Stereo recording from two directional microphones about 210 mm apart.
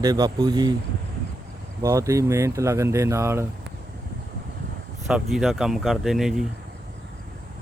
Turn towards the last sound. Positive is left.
turn(degrees=0)  # may be behind; listen again after turning